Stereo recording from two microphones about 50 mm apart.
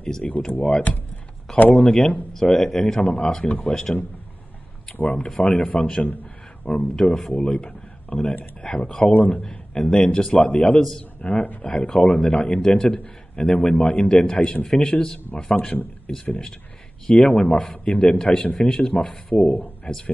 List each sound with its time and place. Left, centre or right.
0.0 s speech: centre
1.6 s speech: left
1.9 s speech: left
2.5 s speech: centre
3.0 s speech: centre
3.4 s speech: left
4.9 s speech: left
7.2 s a man's voice: centre
10.8 s speech: centre
11.1 s speech: left